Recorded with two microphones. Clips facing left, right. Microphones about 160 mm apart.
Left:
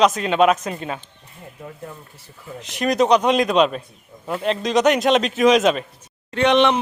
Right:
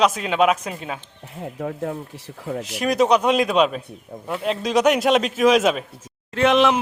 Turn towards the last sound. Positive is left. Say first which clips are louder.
# even
turn(degrees=0)  # may be behind; listen again after turning